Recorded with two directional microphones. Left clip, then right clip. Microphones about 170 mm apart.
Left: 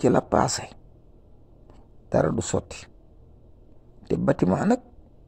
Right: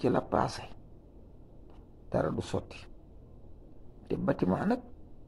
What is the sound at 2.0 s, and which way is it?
Speech, 45° left (ahead or behind).